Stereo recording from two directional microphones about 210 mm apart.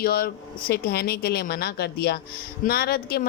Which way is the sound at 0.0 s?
45° left (ahead or behind).